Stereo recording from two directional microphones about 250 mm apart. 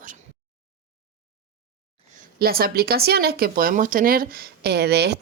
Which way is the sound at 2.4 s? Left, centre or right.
Right.